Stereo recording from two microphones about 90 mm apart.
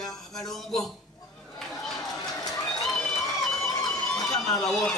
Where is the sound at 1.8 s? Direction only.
5° left (ahead or behind).